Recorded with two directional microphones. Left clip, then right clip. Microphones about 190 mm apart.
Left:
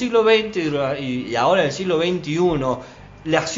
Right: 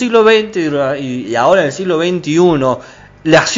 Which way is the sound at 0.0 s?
35° right (ahead or behind).